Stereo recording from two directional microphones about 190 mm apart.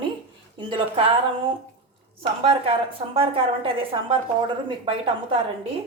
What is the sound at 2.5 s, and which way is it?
A woman's voice, 30° right (ahead or behind).